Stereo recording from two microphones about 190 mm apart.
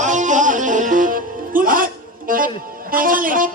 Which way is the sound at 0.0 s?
40° right (ahead or behind).